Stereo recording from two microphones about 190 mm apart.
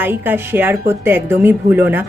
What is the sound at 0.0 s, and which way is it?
Speech, 10° right (ahead or behind).